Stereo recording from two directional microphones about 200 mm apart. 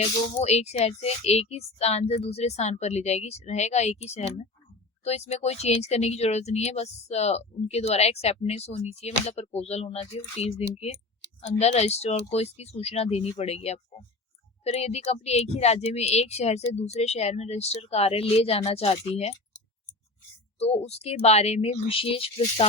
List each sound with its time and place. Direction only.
0.0 s speech: 30° left (ahead or behind)
20.6 s speech: 30° left (ahead or behind)